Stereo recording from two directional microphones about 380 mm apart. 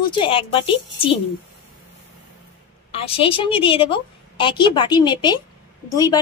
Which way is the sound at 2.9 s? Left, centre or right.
Centre.